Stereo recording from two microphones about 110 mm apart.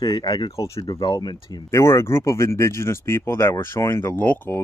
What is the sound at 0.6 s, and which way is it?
Speech, 35° left (ahead or behind).